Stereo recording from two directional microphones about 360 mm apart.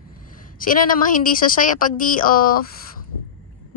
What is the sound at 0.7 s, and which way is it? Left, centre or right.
A woman's voice, left.